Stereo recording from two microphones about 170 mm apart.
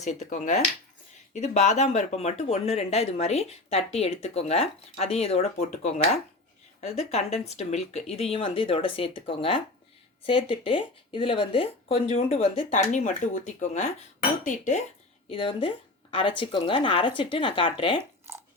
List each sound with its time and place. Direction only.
0.0 s speech: 40° left (ahead or behind)
15.3 s speech: 30° left (ahead or behind)
18.3 s a sound: 15° right (ahead or behind)